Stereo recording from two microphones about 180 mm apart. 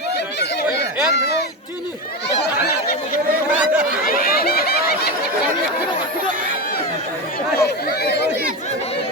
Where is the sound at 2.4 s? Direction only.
60° left (ahead or behind).